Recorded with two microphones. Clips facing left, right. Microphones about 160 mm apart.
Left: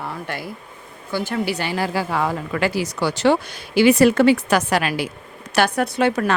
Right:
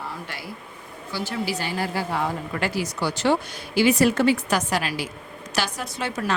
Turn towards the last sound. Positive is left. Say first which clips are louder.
# left 11 dB
turn(degrees=65)  # may be behind; listen again after turning